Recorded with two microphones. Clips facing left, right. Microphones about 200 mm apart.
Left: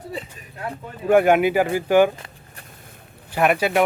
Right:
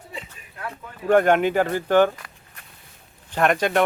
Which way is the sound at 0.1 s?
35° left (ahead or behind).